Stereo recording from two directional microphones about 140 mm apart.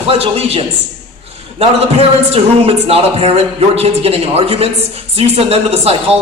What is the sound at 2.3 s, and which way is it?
A woman's voice, 45° right (ahead or behind).